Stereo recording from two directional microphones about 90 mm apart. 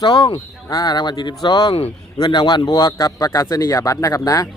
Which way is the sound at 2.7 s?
40° left (ahead or behind).